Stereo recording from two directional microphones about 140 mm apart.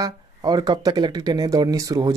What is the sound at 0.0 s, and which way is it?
Speech, 30° right (ahead or behind).